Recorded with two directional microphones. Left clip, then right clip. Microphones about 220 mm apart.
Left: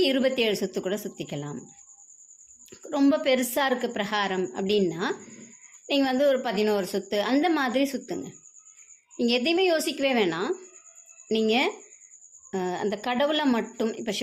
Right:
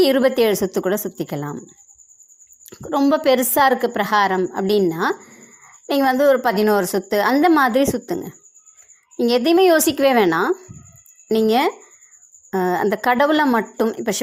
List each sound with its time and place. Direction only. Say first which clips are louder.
0.0 s a woman's voice: right 8 dB; 25° right (ahead or behind)
2.6 s a woman's voice: right 6 dB; 25° right (ahead or behind)